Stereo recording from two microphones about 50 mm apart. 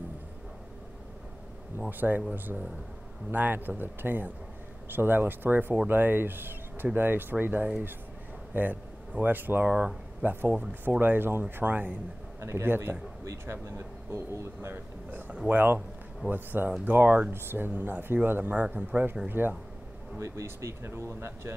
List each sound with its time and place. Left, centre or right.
1.8 s speech: right
12.4 s a man's voice: right
12.6 s speech: right
13.5 s speech: right
15.0 s speech: right
18.5 s speech: right
19.2 s speech: right
20.2 s speech: right